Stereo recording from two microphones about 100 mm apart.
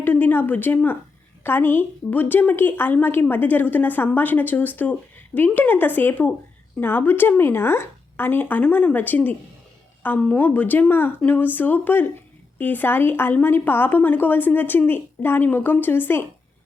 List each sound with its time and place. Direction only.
0.0 s a woman's voice: 20° left (ahead or behind)
10.3 s a woman's voice: 15° left (ahead or behind)